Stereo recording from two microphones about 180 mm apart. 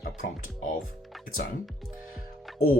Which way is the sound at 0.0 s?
50° left (ahead or behind).